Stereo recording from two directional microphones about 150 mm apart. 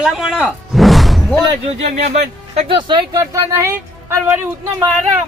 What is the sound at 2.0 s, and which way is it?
Speech, 45° right (ahead or behind).